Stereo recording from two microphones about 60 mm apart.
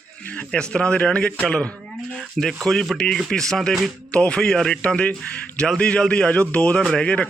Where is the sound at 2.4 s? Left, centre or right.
Centre.